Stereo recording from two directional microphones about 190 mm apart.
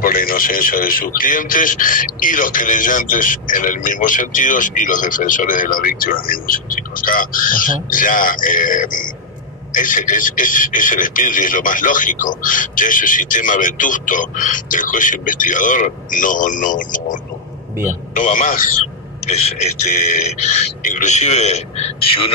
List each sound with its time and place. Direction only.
0.0 s a man's voice: 50° left (ahead or behind); by 22.3 s 35° left (ahead or behind)